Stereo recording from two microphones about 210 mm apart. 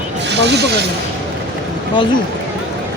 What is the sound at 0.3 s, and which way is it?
Speech, 55° right (ahead or behind).